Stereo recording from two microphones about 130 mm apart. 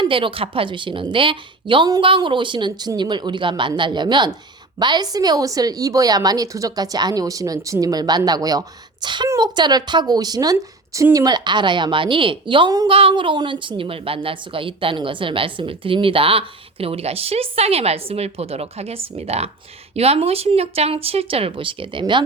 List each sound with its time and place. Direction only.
0.0 s a woman's voice: 40° right (ahead or behind)
12.9 s a woman's voice: 45° right (ahead or behind)